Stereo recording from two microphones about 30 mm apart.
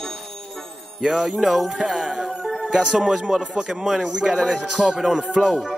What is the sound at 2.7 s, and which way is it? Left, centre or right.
Music, centre.